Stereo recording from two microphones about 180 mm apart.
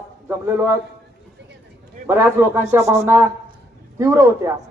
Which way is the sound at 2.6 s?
15° right (ahead or behind).